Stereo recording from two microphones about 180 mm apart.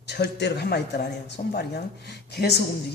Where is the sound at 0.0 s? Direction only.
70° left (ahead or behind).